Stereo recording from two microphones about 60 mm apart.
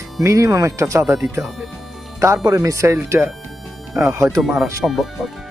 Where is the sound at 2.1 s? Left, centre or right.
Right.